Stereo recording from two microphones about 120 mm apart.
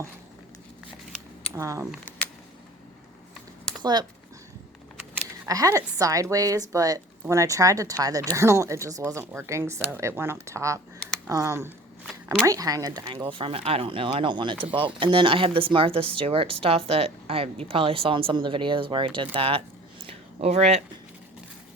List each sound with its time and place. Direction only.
1.5 s a woman's voice: 25° right (ahead or behind)
3.7 s a sound: 5° left (ahead or behind)
5.5 s a woman's voice: 30° right (ahead or behind)
13.1 s speech: 50° right (ahead or behind); by 20.8 s 65° right (ahead or behind)